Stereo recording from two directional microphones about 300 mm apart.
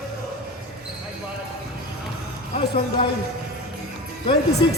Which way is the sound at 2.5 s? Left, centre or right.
Left.